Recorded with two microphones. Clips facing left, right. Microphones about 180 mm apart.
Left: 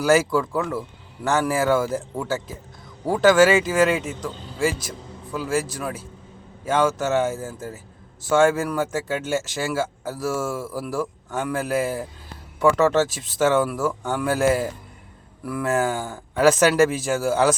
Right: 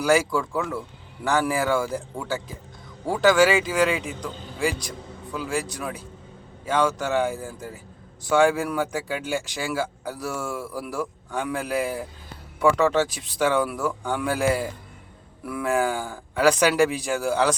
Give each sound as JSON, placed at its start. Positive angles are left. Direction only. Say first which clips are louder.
{"t": 0.0, "sound": "speech", "louder": "left 2 dB", "side_deg": 5}
{"t": 13.1, "sound": "speech", "louder": "left 3 dB", "side_deg": 45}
{"t": 13.3, "sound": "speech", "louder": "left 3 dB", "side_deg": 5}